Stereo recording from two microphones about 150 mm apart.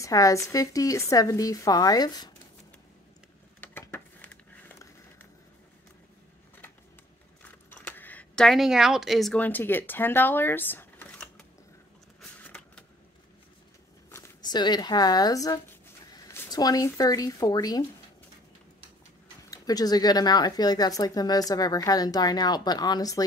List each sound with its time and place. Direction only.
0.0 s speech: 20° left (ahead or behind)
3.6 s a sound: 15° left (ahead or behind)
7.7 s speech: 10° left (ahead or behind)
12.4 s vehicle: 10° left (ahead or behind)
14.1 s a sound: 15° left (ahead or behind)
14.5 s speech: 30° left (ahead or behind)
19.5 s speech: 25° left (ahead or behind)